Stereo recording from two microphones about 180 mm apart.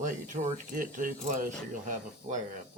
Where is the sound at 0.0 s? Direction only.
45° right (ahead or behind).